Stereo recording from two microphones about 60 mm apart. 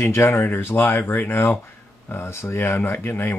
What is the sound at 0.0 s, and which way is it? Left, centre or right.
Speech, left.